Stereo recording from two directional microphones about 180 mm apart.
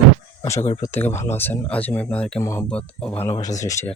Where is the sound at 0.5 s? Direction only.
40° left (ahead or behind).